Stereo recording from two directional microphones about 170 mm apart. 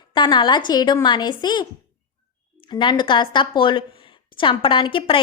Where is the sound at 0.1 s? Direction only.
25° left (ahead or behind).